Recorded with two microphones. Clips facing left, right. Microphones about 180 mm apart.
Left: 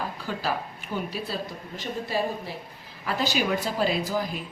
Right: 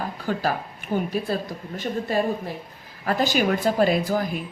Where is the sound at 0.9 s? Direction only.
50° right (ahead or behind).